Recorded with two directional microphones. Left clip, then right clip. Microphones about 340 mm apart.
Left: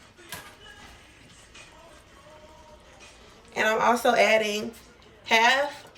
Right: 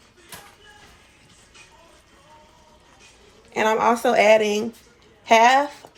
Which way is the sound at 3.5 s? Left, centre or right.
Centre.